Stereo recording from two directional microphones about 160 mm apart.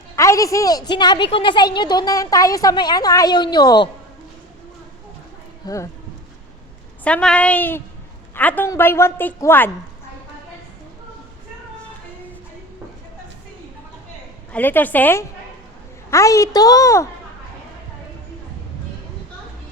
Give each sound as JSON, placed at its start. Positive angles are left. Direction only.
{"t": 0.2, "sound": "a woman's voice", "side_deg": 20}
{"t": 5.6, "sound": "a woman's voice", "side_deg": 20}
{"t": 7.0, "sound": "a woman's voice", "side_deg": 5}
{"t": 14.5, "sound": "a woman's voice", "side_deg": 10}